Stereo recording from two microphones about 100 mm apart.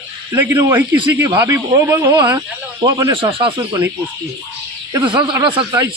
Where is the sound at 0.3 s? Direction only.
20° right (ahead or behind); by 2.4 s 35° right (ahead or behind).